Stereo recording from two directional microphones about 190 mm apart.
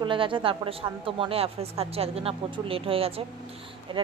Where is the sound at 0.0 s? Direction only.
25° right (ahead or behind).